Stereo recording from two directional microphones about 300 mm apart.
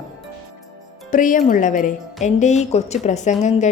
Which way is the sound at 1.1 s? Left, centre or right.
Left.